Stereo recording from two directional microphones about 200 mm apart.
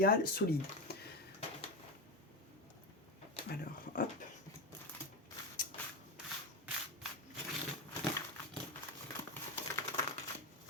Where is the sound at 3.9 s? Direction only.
45° left (ahead or behind).